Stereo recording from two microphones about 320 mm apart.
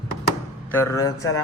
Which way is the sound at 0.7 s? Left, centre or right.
Centre.